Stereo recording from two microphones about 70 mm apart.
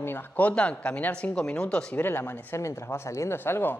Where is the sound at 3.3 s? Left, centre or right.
Left.